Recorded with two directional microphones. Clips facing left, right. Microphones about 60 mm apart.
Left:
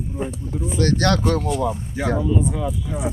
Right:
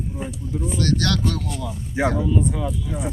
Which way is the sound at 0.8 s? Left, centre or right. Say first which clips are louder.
Left 4 dB; left.